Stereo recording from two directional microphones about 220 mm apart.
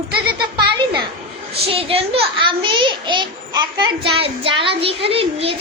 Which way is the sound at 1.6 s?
25° right (ahead or behind).